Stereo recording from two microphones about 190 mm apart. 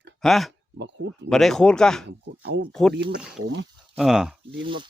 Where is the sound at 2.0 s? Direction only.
65° right (ahead or behind).